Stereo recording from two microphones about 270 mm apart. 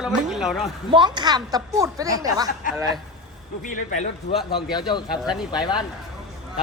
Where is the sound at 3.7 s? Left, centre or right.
Left.